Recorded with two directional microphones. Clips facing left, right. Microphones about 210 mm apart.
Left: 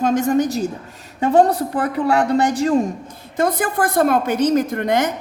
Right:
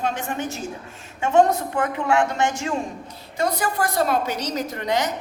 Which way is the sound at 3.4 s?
50° left (ahead or behind).